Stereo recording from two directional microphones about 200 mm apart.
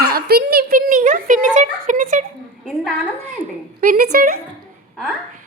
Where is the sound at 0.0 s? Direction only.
50° right (ahead or behind).